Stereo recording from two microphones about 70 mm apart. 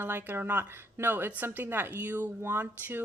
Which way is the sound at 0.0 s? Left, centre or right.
Right.